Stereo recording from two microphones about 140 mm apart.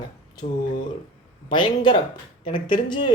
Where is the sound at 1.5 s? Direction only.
35° left (ahead or behind).